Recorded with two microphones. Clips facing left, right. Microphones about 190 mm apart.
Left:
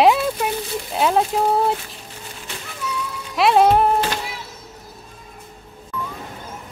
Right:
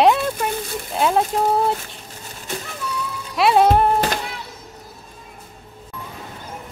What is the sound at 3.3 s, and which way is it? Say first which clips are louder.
Music: even; centre (ahead or behind).